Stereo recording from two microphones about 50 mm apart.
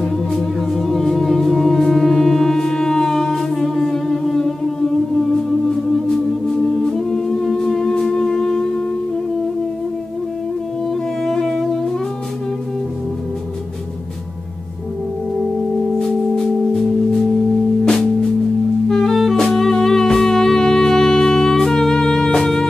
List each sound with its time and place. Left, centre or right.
0.0 s music: centre
6.0 s music: centre
11.2 s music: centre
16.0 s singing bowl: centre
18.9 s music: centre